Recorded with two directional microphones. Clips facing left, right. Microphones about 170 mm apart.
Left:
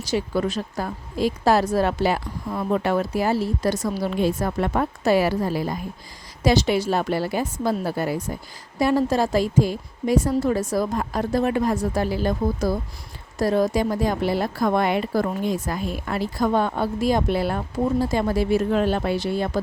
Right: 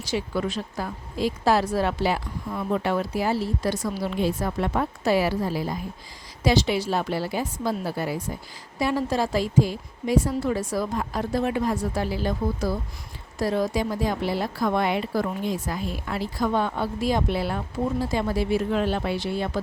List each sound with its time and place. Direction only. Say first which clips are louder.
0.0 s a woman's voice: left 3 dB; 40° left (ahead or behind)